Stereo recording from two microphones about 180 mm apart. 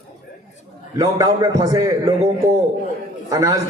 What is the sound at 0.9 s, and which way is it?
A man's voice, 20° right (ahead or behind).